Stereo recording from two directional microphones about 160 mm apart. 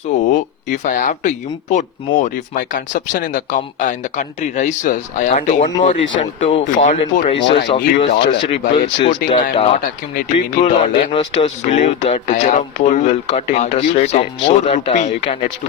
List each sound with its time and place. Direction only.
0.1 s speech: 50° left (ahead or behind)